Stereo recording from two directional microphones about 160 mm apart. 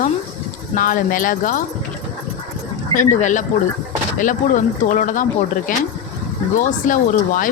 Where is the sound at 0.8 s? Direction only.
60° left (ahead or behind).